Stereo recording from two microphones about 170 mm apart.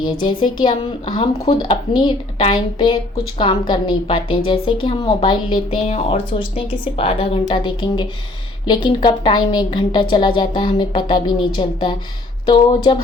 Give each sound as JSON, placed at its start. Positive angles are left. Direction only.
{"t": 0.0, "sound": "a woman's voice", "side_deg": 25}